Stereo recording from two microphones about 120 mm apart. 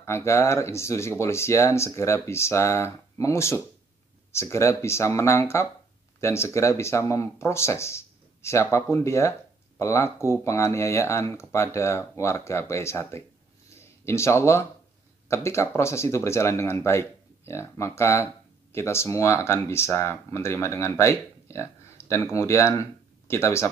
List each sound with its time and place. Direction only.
0.0 s speech: 25° left (ahead or behind)
13.7 s a sound: 25° left (ahead or behind)
15.2 s speech: 25° left (ahead or behind)